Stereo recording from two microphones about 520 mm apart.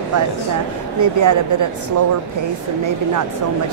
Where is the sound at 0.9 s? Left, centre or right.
Right.